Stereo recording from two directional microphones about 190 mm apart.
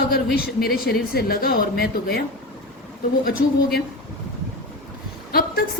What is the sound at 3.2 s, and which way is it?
Speech, 50° left (ahead or behind).